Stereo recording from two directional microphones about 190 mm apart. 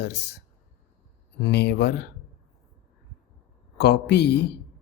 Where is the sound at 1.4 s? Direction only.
60° left (ahead or behind).